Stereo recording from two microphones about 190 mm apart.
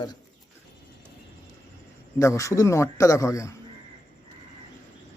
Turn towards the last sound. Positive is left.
turn(degrees=15)  # may be behind; listen again after turning